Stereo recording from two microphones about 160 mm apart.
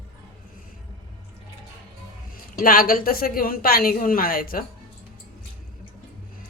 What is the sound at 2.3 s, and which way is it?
A woman's voice, 65° left (ahead or behind).